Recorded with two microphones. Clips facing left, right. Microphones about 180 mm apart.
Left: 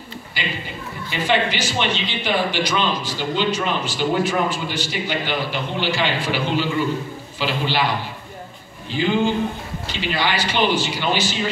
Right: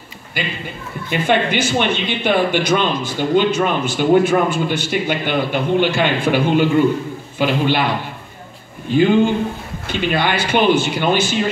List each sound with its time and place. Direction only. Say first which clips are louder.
1.1 s speech: right 4 dB; 55° right (ahead or behind)
8.9 s speech: right 6 dB; 50° right (ahead or behind)